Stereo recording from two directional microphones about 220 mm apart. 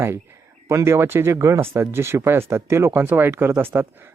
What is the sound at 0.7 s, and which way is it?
Speech, 10° right (ahead or behind).